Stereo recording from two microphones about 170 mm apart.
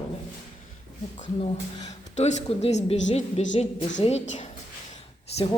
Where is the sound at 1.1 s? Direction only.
40° left (ahead or behind).